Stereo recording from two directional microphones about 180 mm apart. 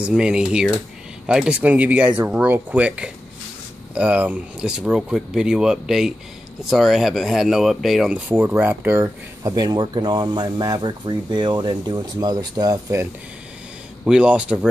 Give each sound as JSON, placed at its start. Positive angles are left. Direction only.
{"t": 0.0, "sound": "speech", "side_deg": -5}
{"t": 14.0, "sound": "speech", "side_deg": -5}